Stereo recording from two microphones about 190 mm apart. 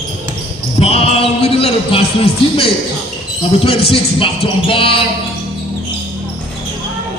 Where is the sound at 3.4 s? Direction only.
30° left (ahead or behind).